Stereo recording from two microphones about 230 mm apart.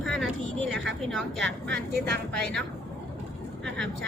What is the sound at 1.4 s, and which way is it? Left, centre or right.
Speech, right.